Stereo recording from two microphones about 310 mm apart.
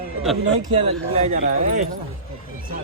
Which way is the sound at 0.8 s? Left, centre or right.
Centre.